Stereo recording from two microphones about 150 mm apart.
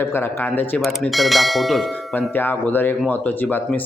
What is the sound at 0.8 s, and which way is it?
Speech, centre (ahead or behind).